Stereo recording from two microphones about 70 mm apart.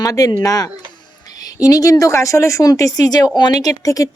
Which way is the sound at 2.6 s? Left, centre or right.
Left.